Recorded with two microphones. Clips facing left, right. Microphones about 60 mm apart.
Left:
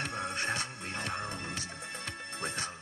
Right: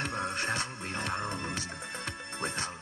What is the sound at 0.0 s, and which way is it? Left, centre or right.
Music, right.